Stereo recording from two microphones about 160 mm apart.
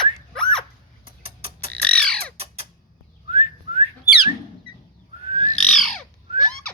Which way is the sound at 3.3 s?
40° right (ahead or behind).